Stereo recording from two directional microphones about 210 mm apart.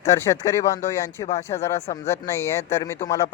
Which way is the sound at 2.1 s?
10° left (ahead or behind).